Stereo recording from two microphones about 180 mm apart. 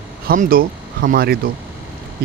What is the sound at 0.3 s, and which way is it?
Speech, 55° right (ahead or behind).